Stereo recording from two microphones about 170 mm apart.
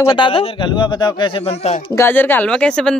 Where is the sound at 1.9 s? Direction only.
10° left (ahead or behind).